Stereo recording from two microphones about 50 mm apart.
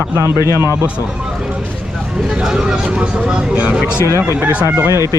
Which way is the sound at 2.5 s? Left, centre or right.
Centre.